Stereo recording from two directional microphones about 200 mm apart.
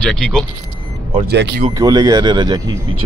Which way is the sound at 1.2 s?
55° right (ahead or behind).